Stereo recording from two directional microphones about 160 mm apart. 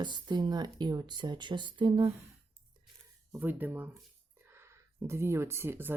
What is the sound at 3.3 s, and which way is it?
Speech, 10° right (ahead or behind).